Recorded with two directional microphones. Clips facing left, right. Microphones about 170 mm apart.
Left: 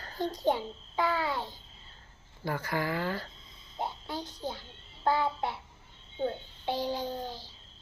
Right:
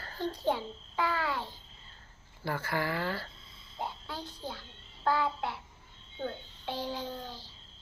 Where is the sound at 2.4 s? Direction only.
15° left (ahead or behind).